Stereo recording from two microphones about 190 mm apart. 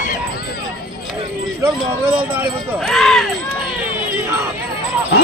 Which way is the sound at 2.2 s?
10° right (ahead or behind).